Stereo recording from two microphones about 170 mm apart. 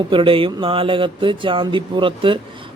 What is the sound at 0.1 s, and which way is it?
Speech, 30° right (ahead or behind).